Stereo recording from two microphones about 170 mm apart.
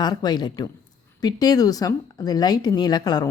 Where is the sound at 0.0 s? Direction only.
25° left (ahead or behind).